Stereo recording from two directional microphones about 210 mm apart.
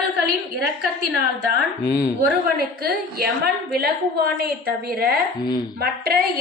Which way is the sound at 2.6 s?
45° right (ahead or behind).